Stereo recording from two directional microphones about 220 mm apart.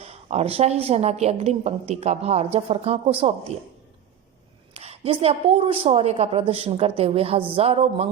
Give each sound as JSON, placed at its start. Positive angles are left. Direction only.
{"t": 0.0, "sound": "a woman's voice", "side_deg": -30}
{"t": 4.7, "sound": "a woman's voice", "side_deg": -30}